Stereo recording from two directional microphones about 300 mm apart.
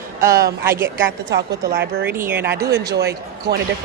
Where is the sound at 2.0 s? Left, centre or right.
Centre.